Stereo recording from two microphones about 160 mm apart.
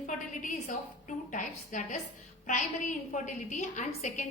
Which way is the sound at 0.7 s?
50° left (ahead or behind).